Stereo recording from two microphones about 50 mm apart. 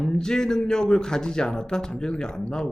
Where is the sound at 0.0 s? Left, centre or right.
Centre.